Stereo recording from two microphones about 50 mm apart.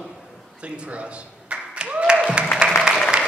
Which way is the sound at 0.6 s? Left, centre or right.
Right.